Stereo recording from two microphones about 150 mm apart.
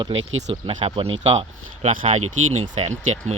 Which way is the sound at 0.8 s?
40° right (ahead or behind).